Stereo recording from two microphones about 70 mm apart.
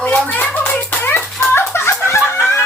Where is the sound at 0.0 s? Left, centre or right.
Left.